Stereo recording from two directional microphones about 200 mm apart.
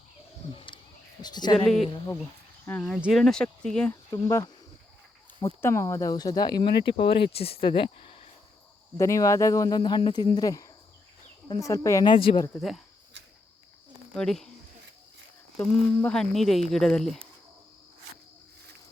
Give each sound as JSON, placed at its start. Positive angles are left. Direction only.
{"t": 0.5, "sound": "a sound", "side_deg": 25}
{"t": 1.2, "sound": "speech", "side_deg": 20}
{"t": 1.5, "sound": "speech", "side_deg": 5}
{"t": 4.1, "sound": "speech", "side_deg": 15}
{"t": 5.6, "sound": "speech", "side_deg": 15}
{"t": 9.0, "sound": "speech", "side_deg": 15}
{"t": 12.5, "sound": "speech", "side_deg": 0}
{"t": 14.1, "sound": "speech", "side_deg": 5}
{"t": 15.5, "sound": "speech", "side_deg": 5}